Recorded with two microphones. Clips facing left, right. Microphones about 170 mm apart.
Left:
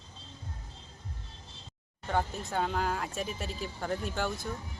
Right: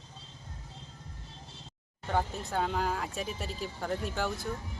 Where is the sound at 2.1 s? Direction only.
Centre (ahead or behind).